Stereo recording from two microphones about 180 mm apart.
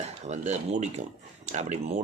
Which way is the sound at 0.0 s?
40° right (ahead or behind).